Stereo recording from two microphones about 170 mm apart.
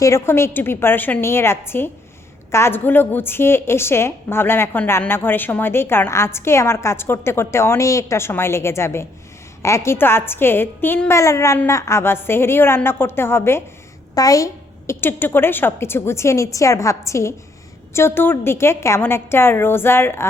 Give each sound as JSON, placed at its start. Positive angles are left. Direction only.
{"t": 0.0, "sound": "a woman's voice", "side_deg": 15}